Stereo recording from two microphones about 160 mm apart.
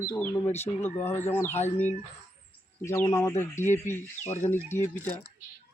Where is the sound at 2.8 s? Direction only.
20° left (ahead or behind).